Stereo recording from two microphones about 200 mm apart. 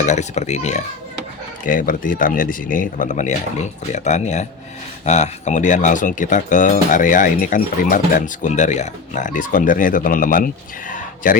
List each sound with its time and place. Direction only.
0.0 s speech: 35° left (ahead or behind)